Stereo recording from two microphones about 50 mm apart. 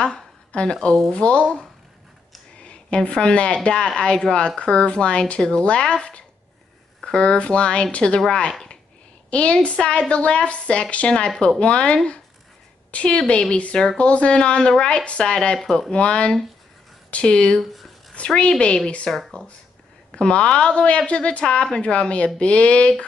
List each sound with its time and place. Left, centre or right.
0.5 s a woman's voice: left
17.6 s speech: centre
18.1 s a woman's voice: left